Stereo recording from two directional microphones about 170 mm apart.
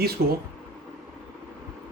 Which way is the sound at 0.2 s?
75° right (ahead or behind).